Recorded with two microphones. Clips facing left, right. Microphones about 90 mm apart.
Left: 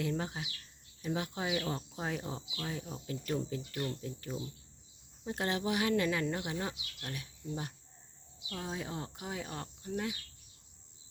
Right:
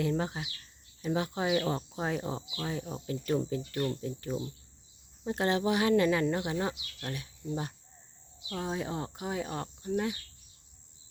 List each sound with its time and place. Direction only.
0.0 s speech: 35° right (ahead or behind)